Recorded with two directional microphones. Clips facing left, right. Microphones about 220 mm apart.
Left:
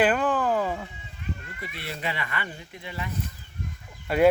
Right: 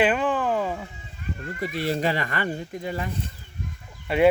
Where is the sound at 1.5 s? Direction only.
40° right (ahead or behind).